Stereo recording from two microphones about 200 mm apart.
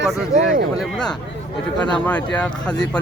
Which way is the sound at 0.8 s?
5° left (ahead or behind).